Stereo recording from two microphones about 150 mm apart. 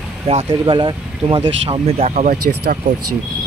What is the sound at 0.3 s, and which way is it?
Speech, 40° right (ahead or behind).